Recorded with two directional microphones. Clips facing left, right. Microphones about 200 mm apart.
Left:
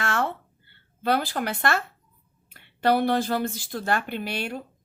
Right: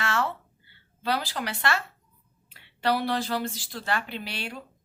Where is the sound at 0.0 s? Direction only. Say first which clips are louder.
Left 2 dB; 50° left (ahead or behind).